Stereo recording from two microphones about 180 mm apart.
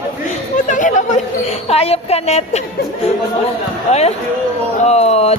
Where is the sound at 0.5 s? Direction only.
45° left (ahead or behind).